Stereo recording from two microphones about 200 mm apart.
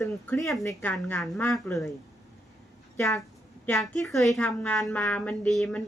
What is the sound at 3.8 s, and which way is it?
A woman's voice, centre (ahead or behind).